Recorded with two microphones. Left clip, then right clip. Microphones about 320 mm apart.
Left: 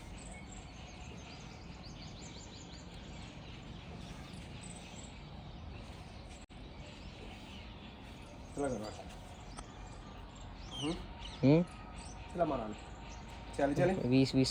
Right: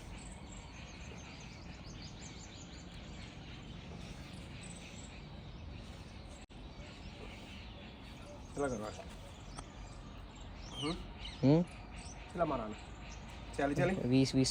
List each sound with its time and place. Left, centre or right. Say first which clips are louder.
8.5 s speech: even; centre
10.7 s a sound: left 1 dB; centre
12.3 s speech: left 1 dB; centre
13.6 s speech: left 2 dB; centre
14.1 s speech: left 1 dB; centre